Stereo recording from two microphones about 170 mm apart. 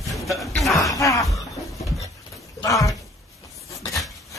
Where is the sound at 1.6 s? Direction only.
Centre (ahead or behind).